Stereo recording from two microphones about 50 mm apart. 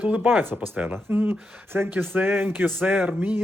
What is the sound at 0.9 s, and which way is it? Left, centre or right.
Speech, right.